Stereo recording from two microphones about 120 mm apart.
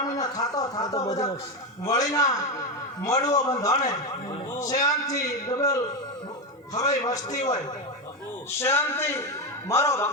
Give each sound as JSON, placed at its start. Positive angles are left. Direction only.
{"t": 0.0, "sound": "a man's voice", "side_deg": 30}
{"t": 8.5, "sound": "a man's voice", "side_deg": 20}